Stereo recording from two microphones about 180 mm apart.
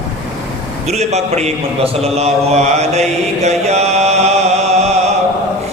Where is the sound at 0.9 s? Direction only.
40° right (ahead or behind).